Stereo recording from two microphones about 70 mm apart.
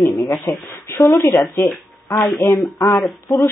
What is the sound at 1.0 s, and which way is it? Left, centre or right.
Speech, left.